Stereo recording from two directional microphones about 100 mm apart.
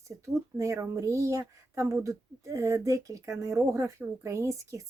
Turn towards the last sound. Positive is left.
turn(degrees=-30)  # may be behind; listen again after turning